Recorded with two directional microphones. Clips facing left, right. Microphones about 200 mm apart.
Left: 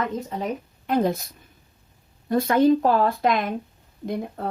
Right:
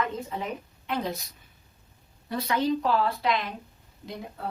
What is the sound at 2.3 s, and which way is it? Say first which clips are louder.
Speech: left 9 dB; 50° left (ahead or behind).